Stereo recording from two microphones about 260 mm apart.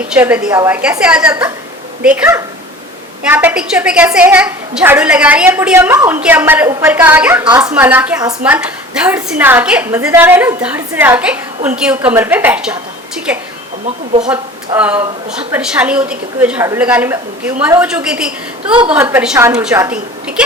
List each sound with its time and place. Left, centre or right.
0.1 s a woman's voice: centre
14.1 s a woman's voice: right
14.7 s a woman's voice: centre